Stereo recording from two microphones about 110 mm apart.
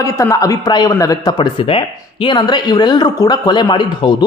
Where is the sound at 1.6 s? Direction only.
55° left (ahead or behind).